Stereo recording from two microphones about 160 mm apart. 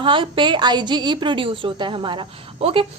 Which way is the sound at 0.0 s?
30° right (ahead or behind).